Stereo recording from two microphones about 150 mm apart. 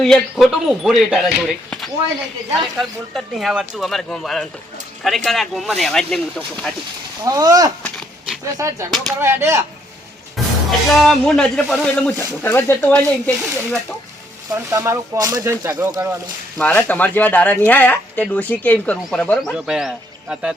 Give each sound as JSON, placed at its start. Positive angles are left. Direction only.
{"t": 0.0, "sound": "speech", "side_deg": 0}
{"t": 7.3, "sound": "speech", "side_deg": -25}
{"t": 7.8, "sound": "a sound", "side_deg": 10}
{"t": 8.5, "sound": "speech", "side_deg": -20}
{"t": 9.2, "sound": "a sound", "side_deg": -20}
{"t": 10.3, "sound": "speech", "side_deg": 0}
{"t": 14.7, "sound": "speech", "side_deg": -20}
{"t": 16.6, "sound": "speech", "side_deg": 10}